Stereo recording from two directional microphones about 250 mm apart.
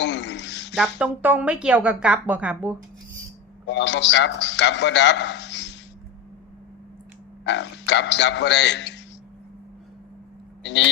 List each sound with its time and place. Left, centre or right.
0.0 s a sound: left
0.8 s a woman's voice: centre
3.7 s a man's voice: left
7.4 s a man's voice: left
10.6 s speech: left